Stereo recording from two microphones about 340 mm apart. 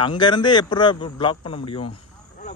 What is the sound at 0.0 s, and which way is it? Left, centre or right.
A man's voice, centre.